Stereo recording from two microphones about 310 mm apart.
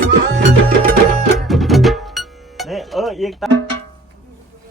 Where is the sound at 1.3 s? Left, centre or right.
Centre.